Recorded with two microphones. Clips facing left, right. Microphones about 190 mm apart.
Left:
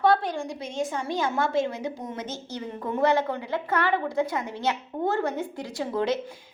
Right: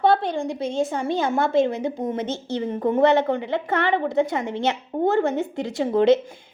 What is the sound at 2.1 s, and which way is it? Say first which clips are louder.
A woman's voice: right 8 dB; 25° right (ahead or behind).